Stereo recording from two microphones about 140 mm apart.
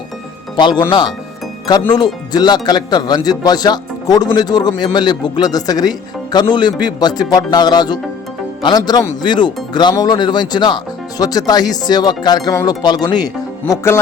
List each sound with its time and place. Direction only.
0.5 s speech: 30° left (ahead or behind)